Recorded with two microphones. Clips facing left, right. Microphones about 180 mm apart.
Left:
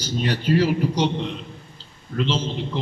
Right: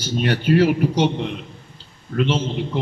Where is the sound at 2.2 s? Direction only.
60° right (ahead or behind).